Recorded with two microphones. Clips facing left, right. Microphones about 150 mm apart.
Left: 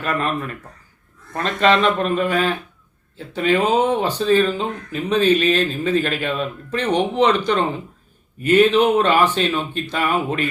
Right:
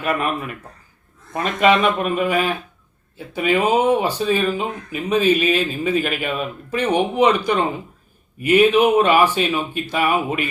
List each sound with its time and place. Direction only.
0.0 s speech: 10° right (ahead or behind)